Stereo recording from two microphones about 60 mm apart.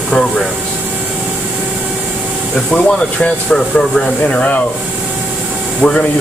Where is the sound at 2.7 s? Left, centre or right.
Centre.